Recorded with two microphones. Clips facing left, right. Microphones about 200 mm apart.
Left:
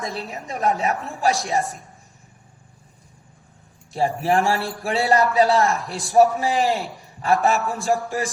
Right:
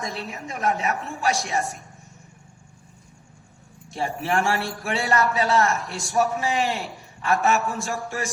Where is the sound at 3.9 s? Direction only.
35° left (ahead or behind).